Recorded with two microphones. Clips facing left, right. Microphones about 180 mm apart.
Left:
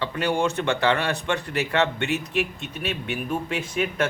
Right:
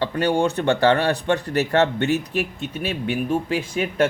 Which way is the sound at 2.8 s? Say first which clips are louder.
Right 5 dB; 30° right (ahead or behind).